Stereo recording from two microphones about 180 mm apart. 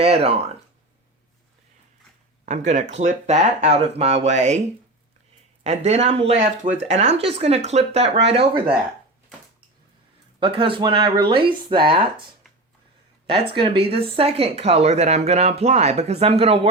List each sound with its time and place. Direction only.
0.0 s speech: 35° right (ahead or behind)
2.6 s speech: 40° right (ahead or behind)
5.6 s speech: 35° right (ahead or behind)
10.4 s speech: 30° right (ahead or behind)
13.2 s speech: 30° right (ahead or behind)